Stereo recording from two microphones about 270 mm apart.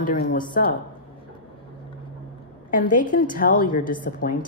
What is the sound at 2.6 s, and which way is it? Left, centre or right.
A woman's voice, left.